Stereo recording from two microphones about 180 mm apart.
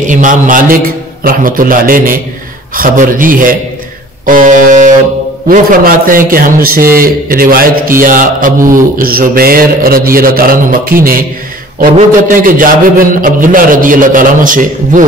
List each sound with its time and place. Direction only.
0.0 s a man's voice: 45° right (ahead or behind)